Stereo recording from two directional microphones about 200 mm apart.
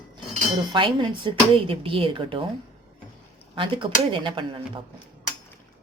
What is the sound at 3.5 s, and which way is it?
Speech, 25° right (ahead or behind).